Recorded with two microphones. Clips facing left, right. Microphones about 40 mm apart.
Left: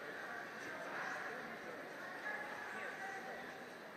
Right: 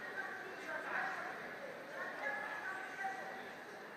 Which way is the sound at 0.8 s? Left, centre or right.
Right.